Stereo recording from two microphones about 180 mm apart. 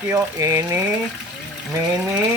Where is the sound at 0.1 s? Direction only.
15° right (ahead or behind).